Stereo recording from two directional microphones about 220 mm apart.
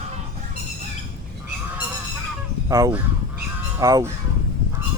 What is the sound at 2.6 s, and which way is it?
Speech, 15° right (ahead or behind).